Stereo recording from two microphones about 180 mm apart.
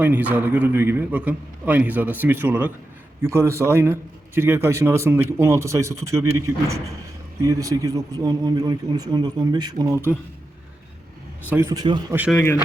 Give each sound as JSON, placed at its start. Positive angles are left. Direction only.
{"t": 0.0, "sound": "a man's voice", "side_deg": -10}
{"t": 11.4, "sound": "speech", "side_deg": -15}
{"t": 12.3, "sound": "speech", "side_deg": 10}